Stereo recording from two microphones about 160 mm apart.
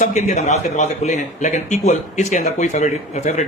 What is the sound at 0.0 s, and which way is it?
A man's voice, 45° left (ahead or behind).